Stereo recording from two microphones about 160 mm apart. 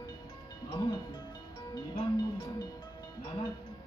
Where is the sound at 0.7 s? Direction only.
25° left (ahead or behind).